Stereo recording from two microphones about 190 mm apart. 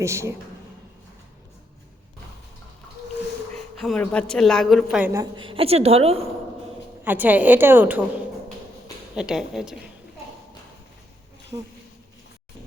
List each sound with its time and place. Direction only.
0.0 s a woman's voice: 15° right (ahead or behind)
3.5 s a sound: 5° left (ahead or behind)
4.0 s speech: 5° left (ahead or behind)
5.2 s a woman's voice: 25° right (ahead or behind)
7.0 s a woman's voice: 10° right (ahead or behind)
9.1 s speech: 5° right (ahead or behind)
11.5 s a woman's voice: 20° right (ahead or behind)